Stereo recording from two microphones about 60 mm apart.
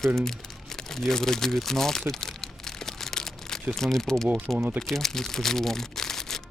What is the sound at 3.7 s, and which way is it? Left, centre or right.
Speech, centre.